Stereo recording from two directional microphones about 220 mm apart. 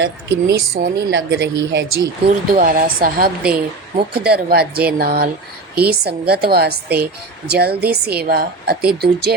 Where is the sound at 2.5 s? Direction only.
40° right (ahead or behind).